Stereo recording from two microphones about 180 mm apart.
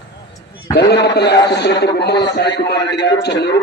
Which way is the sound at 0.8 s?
70° left (ahead or behind).